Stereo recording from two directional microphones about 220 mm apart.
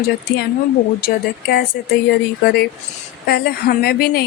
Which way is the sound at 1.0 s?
45° left (ahead or behind).